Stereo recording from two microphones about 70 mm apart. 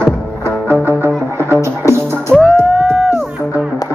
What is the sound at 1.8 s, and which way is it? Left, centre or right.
Music, left.